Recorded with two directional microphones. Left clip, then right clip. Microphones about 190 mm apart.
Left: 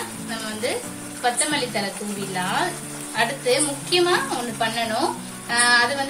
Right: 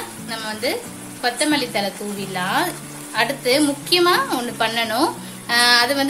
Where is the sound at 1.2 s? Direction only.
45° right (ahead or behind).